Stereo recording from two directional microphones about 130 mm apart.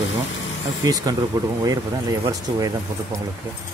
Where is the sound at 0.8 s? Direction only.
30° right (ahead or behind).